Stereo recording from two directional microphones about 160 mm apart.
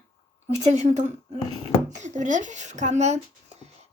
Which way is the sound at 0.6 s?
45° right (ahead or behind).